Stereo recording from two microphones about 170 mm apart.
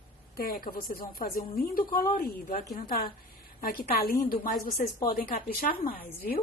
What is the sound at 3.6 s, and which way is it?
A woman's voice, 55° left (ahead or behind).